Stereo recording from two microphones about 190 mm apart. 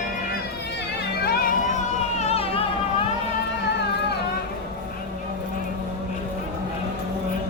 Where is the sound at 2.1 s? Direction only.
30° left (ahead or behind).